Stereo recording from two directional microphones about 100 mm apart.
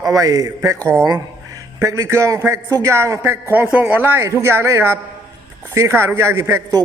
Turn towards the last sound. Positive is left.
turn(degrees=-25)  # may be behind; listen again after turning